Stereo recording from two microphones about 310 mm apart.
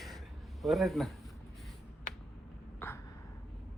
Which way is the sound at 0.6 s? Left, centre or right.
Centre.